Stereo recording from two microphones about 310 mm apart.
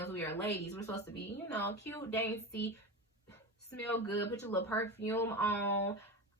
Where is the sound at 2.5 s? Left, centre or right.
Left.